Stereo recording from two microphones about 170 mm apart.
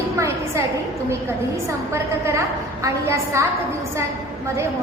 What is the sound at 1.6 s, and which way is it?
A woman's voice, 15° right (ahead or behind).